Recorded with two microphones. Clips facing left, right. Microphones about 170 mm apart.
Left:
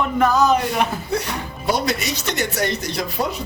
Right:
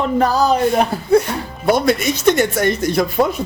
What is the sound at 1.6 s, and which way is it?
Speech, 55° right (ahead or behind).